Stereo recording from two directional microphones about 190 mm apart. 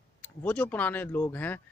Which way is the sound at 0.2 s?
10° left (ahead or behind).